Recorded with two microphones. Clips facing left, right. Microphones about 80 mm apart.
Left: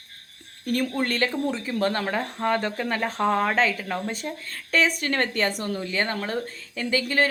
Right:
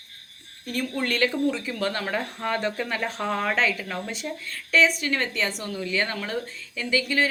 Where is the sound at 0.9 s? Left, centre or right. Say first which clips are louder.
Even; left.